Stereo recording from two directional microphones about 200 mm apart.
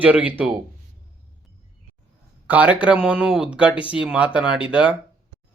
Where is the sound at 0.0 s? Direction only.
10° right (ahead or behind).